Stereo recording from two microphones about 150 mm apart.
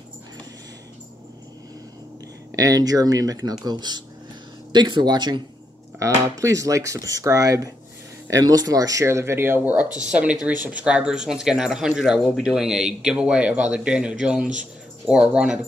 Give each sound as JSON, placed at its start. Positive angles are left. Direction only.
{"t": 2.5, "sound": "speech", "side_deg": -25}